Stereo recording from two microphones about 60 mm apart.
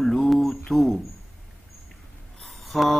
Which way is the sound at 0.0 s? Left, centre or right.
Centre.